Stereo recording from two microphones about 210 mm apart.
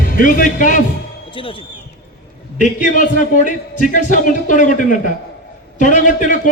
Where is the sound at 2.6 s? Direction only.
35° left (ahead or behind).